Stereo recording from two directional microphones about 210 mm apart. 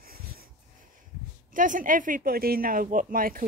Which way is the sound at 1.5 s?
40° right (ahead or behind).